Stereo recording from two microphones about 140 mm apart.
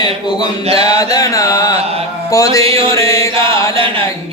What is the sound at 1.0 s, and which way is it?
Carnatic music, 25° left (ahead or behind).